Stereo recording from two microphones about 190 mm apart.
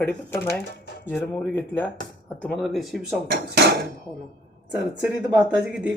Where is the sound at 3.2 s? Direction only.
60° right (ahead or behind).